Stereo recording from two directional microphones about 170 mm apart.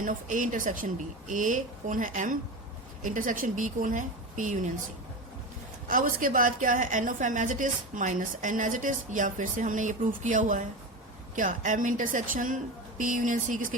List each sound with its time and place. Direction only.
0.0 s a woman's voice: 50° right (ahead or behind)
5.9 s a woman's voice: 55° right (ahead or behind)